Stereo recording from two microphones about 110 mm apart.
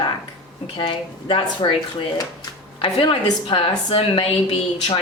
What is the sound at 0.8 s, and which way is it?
A woman's voice, 50° left (ahead or behind).